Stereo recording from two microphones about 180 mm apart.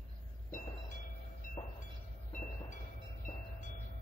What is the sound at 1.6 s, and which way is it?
Train, 20° left (ahead or behind).